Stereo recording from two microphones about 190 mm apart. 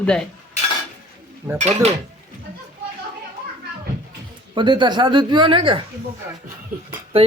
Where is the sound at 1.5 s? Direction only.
35° right (ahead or behind).